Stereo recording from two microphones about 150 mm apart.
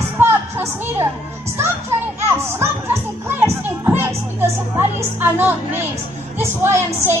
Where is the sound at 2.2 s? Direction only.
15° right (ahead or behind).